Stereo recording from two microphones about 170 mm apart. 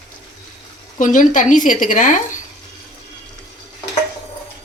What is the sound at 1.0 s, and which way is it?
Speech, 50° left (ahead or behind).